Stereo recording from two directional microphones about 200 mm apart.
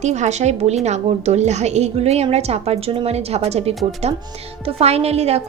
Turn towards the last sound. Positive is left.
turn(degrees=-30)  # may be behind; listen again after turning